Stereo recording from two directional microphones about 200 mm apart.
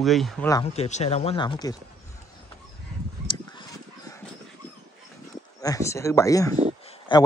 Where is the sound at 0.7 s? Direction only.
30° left (ahead or behind).